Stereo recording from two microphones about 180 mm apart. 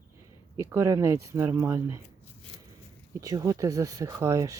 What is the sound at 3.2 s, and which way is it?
Speech, 20° right (ahead or behind).